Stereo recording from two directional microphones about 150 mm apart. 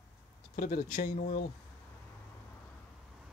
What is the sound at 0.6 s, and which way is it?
Speech, 70° left (ahead or behind).